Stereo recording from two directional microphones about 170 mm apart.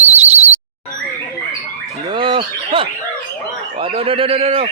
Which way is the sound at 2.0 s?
30° right (ahead or behind).